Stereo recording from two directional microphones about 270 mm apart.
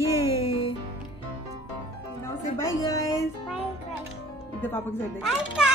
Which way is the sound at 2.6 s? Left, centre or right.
Centre.